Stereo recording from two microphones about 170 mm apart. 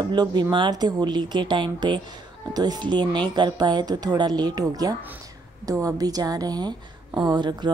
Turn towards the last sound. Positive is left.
turn(degrees=-25)  # may be behind; listen again after turning